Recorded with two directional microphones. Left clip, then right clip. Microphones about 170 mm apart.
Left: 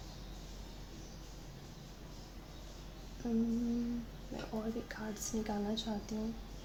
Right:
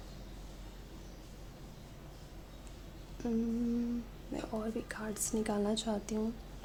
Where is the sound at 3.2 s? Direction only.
40° right (ahead or behind).